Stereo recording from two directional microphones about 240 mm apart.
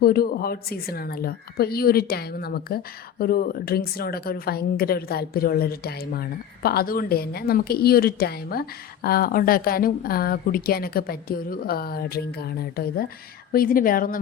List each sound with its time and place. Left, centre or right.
0.0 s speech: left